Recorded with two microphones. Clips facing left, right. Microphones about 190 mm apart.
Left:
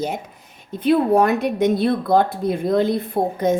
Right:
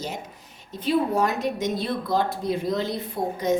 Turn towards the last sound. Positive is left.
turn(degrees=55)  # may be behind; listen again after turning